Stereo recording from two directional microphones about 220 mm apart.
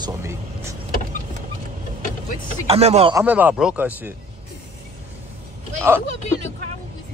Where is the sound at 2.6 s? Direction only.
30° right (ahead or behind).